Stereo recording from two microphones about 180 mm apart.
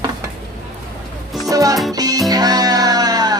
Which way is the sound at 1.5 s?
20° right (ahead or behind).